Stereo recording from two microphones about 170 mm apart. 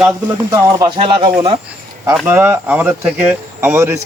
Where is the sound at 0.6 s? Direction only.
25° right (ahead or behind).